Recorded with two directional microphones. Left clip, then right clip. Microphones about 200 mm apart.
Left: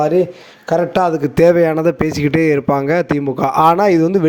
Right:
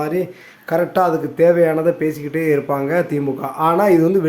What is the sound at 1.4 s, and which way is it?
Speech, 50° left (ahead or behind).